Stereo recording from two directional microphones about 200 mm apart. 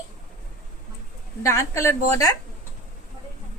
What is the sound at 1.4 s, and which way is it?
Speech, 15° left (ahead or behind).